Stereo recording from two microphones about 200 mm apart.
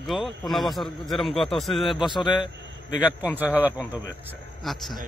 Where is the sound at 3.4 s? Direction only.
10° right (ahead or behind).